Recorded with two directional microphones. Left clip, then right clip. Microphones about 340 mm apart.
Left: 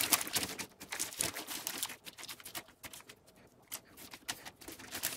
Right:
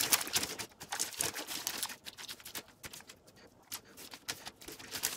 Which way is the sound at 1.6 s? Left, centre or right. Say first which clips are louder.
Right 2 dB; centre.